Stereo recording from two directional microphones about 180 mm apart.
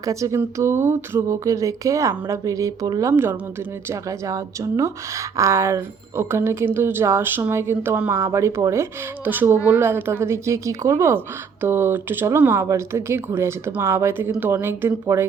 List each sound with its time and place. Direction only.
0.0 s speech: 15° right (ahead or behind)